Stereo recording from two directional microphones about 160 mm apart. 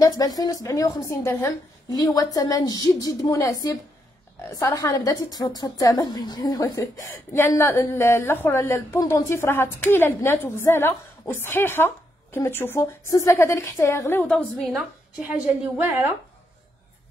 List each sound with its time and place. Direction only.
0.0 s a woman's voice: 20° left (ahead or behind); by 15.7 s 5° right (ahead or behind)